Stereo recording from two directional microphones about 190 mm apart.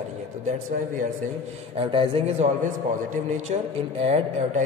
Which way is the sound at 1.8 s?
25° right (ahead or behind).